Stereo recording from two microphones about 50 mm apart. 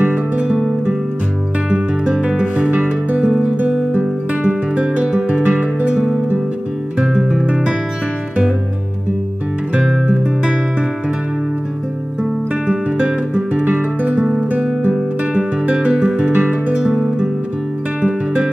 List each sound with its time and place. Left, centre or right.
0.0 s music: right
2.2 s music: right
3.9 s music: right
7.0 s music: centre
9.8 s music: centre
12.6 s music: right
14.1 s guitar: centre
14.9 s music: right
18.0 s music: right